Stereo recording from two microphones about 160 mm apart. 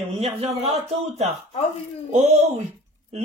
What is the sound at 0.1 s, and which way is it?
Speech, 40° right (ahead or behind).